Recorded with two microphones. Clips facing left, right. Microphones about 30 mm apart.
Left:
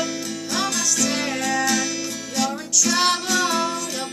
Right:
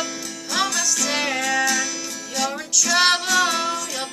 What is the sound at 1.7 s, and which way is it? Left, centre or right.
Music, centre.